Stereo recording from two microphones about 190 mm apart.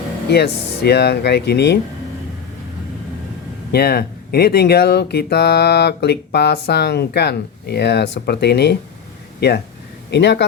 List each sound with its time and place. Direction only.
0.3 s speech: 60° left (ahead or behind)
3.7 s speech: 55° left (ahead or behind)